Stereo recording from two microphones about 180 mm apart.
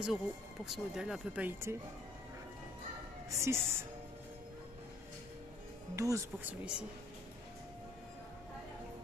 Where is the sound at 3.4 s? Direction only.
15° right (ahead or behind).